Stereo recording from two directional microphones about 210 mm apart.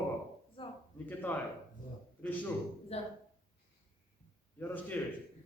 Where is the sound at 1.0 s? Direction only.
10° left (ahead or behind).